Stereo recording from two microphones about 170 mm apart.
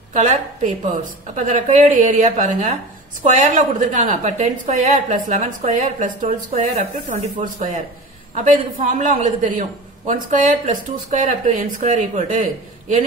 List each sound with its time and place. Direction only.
0.1 s a man's voice: 45° right (ahead or behind)